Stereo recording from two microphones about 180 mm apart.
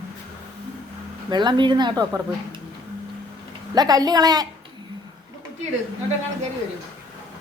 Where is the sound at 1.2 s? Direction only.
25° right (ahead or behind).